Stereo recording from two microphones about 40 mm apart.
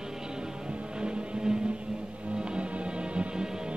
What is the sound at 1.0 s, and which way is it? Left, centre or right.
Music, right.